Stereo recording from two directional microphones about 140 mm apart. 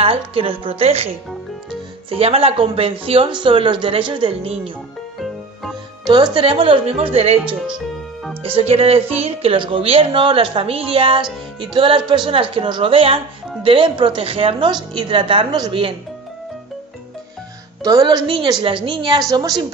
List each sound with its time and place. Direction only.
0.0 s speech: 40° right (ahead or behind)
2.0 s speech: 45° right (ahead or behind)
5.2 s music: centre (ahead or behind)
6.0 s speech: 30° right (ahead or behind)
7.6 s music: centre (ahead or behind)
8.5 s speech: 40° right (ahead or behind)
17.8 s speech: 30° right (ahead or behind)